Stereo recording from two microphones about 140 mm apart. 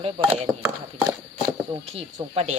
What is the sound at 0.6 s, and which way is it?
Speech, 20° right (ahead or behind).